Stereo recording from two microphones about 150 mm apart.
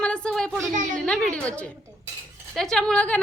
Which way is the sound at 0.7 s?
55° right (ahead or behind).